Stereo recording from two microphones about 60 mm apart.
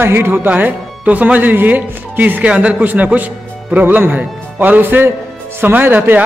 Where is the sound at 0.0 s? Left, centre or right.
Right.